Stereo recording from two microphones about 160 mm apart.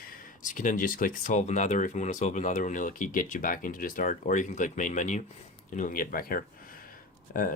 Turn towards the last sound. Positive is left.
turn(degrees=60)  # may be behind; listen again after turning